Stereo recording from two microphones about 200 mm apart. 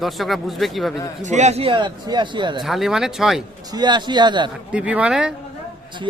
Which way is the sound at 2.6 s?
Centre (ahead or behind).